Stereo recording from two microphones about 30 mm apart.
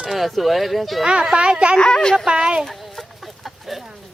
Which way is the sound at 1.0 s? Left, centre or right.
Right.